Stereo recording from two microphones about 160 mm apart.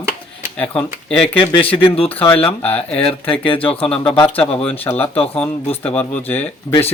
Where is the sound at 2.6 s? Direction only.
10° left (ahead or behind).